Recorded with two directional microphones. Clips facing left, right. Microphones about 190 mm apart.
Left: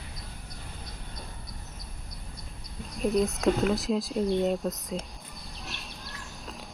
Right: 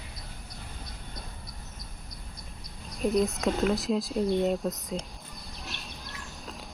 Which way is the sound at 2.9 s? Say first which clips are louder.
Even; centre (ahead or behind).